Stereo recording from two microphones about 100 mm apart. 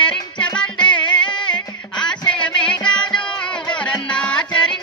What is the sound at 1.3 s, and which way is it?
Music, 50° left (ahead or behind).